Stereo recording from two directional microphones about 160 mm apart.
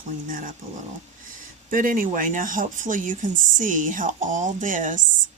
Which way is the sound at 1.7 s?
60° right (ahead or behind).